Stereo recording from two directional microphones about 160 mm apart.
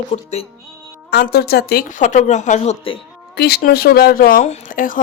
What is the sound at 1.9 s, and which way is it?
Speech, 50° left (ahead or behind).